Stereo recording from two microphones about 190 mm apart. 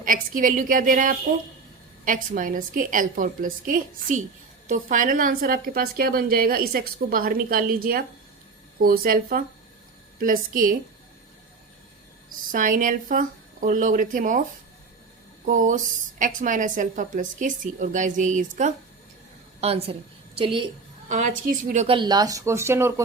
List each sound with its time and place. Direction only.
0.0 s a woman's voice: 45° right (ahead or behind)
12.5 s a woman's voice: 45° right (ahead or behind)
15.4 s a woman's voice: 40° right (ahead or behind)
21.1 s a woman's voice: 40° right (ahead or behind)
21.9 s speech: 20° right (ahead or behind)